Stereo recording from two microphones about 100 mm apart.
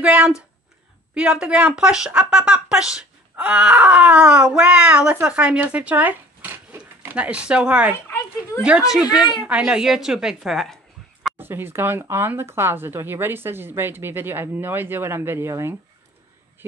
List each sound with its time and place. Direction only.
0.0 s a woman's voice: 15° right (ahead or behind)
11.3 s speech: 20° right (ahead or behind)